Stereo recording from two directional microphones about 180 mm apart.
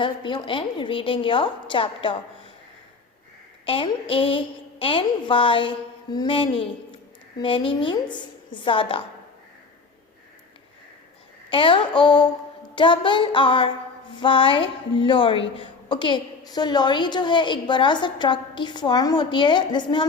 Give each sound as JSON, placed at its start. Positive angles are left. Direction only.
{"t": 0.0, "sound": "a woman's voice", "side_deg": 25}
{"t": 3.7, "sound": "a woman's voice", "side_deg": 30}
{"t": 11.5, "sound": "a woman's voice", "side_deg": 30}